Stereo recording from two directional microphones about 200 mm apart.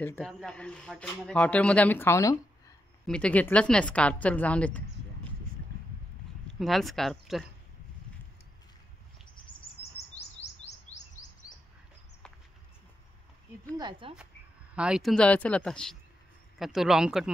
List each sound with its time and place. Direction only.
0.0 s speech: 5° left (ahead or behind)
6.4 s speech: centre (ahead or behind)
9.8 s chirp: 30° left (ahead or behind)
13.7 s speech: 25° right (ahead or behind)
14.7 s speech: 5° right (ahead or behind)